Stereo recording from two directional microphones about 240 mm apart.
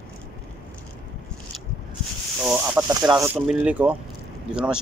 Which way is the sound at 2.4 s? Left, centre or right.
Centre.